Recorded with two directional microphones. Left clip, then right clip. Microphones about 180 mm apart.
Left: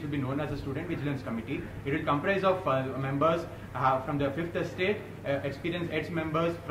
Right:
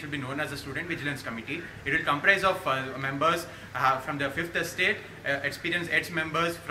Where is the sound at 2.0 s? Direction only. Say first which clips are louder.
Right 3 dB; 5° right (ahead or behind).